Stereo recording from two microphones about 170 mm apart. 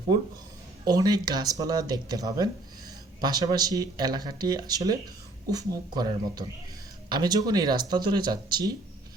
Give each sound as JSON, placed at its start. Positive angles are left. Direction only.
{"t": 0.9, "sound": "speech", "side_deg": -20}